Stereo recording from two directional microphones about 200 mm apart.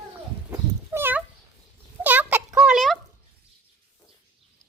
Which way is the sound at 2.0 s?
10° right (ahead or behind).